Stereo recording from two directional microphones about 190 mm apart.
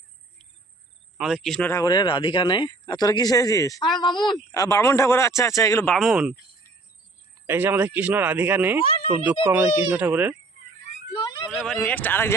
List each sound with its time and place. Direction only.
1.2 s speech: centre (ahead or behind)
1.7 s speech: 20° left (ahead or behind); by 6.4 s 5° right (ahead or behind)
7.4 s speech: 10° right (ahead or behind)
8.8 s speech: 30° left (ahead or behind)
9.2 s speech: 10° right (ahead or behind)
11.1 s a sound: 20° left (ahead or behind)
11.5 s speech: centre (ahead or behind)